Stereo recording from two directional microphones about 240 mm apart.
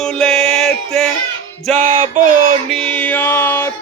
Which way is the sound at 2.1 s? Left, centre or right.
Right.